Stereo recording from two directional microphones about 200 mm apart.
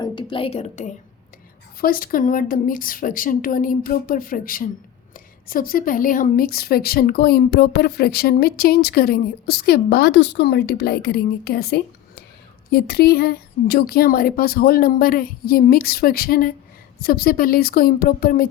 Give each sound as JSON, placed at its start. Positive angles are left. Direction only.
{"t": 0.0, "sound": "a woman's voice", "side_deg": 25}
{"t": 1.8, "sound": "a woman's voice", "side_deg": 45}